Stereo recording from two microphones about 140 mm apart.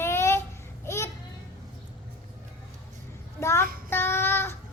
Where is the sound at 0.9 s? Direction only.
20° left (ahead or behind).